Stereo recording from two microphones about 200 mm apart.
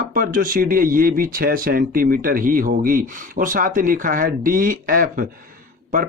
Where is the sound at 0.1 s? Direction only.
45° right (ahead or behind).